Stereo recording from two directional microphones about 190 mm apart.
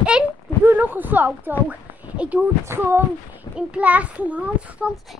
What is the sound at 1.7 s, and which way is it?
Speech, 10° right (ahead or behind).